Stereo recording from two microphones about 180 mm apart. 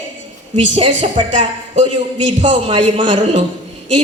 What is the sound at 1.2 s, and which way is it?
Speech, 30° right (ahead or behind).